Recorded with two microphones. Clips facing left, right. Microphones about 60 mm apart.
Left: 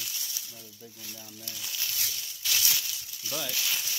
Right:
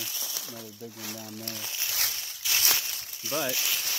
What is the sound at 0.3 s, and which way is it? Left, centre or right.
Speech, right.